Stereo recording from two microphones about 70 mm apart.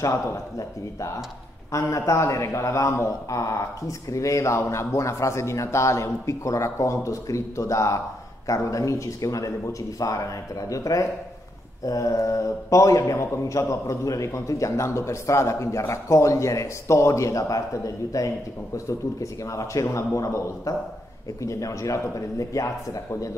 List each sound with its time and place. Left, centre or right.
0.0 s a man's voice: left